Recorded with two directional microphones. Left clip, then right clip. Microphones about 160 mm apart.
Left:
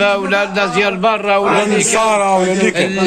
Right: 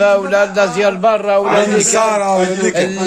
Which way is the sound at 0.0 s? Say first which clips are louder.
Right 2 dB; 35° right (ahead or behind).